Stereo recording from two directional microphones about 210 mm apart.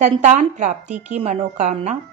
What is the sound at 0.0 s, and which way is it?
A woman's voice, 35° right (ahead or behind).